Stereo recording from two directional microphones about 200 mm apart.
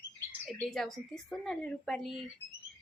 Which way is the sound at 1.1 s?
Centre (ahead or behind).